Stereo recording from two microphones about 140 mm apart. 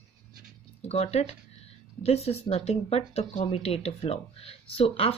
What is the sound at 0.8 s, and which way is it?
Speech, 50° left (ahead or behind).